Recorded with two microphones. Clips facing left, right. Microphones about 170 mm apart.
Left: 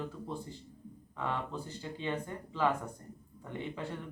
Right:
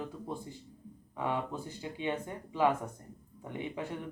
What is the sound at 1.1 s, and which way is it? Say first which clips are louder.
Speech: right 2 dB; 15° right (ahead or behind).